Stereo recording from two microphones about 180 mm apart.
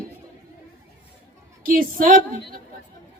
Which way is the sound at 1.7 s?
50° right (ahead or behind).